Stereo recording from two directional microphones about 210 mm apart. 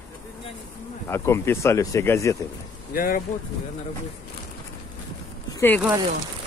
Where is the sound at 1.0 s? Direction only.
15° left (ahead or behind).